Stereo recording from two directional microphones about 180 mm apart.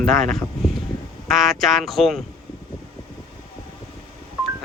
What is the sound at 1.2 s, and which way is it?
Speech, centre (ahead or behind).